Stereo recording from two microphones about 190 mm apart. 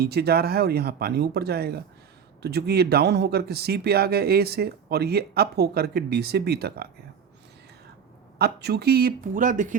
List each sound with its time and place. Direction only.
0.0 s speech: 55° right (ahead or behind)
8.4 s speech: 55° right (ahead or behind)